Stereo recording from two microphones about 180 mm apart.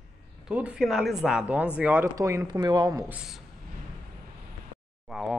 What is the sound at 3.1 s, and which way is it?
Speech, 5° right (ahead or behind).